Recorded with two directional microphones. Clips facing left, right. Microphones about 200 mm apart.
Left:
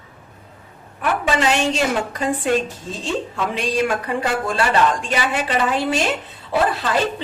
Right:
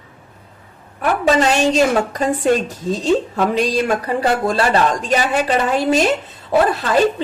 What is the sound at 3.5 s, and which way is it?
Speech, 35° right (ahead or behind).